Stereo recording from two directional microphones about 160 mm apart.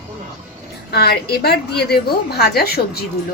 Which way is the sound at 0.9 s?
80° left.